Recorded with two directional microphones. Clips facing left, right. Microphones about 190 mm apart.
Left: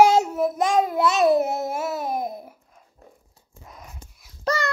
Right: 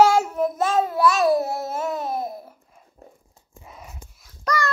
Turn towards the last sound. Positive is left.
turn(degrees=25)  # may be behind; listen again after turning